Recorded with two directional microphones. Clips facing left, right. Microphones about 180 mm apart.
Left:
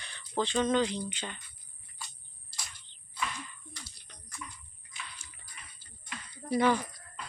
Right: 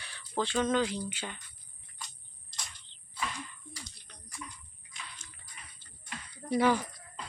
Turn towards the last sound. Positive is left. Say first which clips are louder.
# even
turn(degrees=-10)  # may be behind; listen again after turning